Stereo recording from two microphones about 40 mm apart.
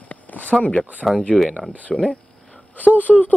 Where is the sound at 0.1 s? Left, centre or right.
Left.